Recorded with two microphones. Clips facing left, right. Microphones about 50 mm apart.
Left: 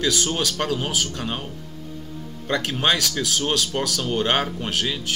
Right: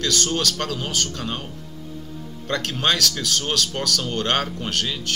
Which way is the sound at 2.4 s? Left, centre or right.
Centre.